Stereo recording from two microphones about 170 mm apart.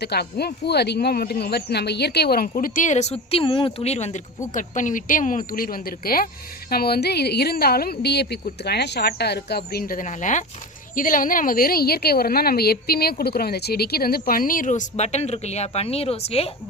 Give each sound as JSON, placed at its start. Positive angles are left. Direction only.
{"t": 0.0, "sound": "speech", "side_deg": 70}
{"t": 2.5, "sound": "a woman's voice", "side_deg": 50}